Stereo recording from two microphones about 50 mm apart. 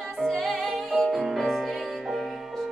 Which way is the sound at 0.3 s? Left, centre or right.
Centre.